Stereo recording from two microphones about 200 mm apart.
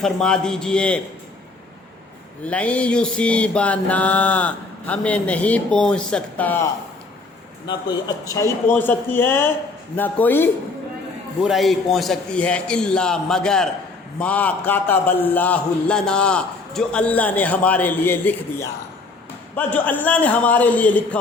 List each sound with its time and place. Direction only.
0.0 s a man's voice: 5° left (ahead or behind)
2.4 s a man's voice: 5° left (ahead or behind)
7.7 s a man's voice: 20° left (ahead or behind)